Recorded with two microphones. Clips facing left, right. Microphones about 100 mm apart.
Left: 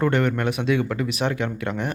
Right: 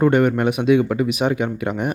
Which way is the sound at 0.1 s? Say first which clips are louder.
Right 5 dB; 10° right (ahead or behind).